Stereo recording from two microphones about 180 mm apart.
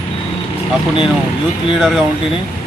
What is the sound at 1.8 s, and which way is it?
Speech, centre (ahead or behind).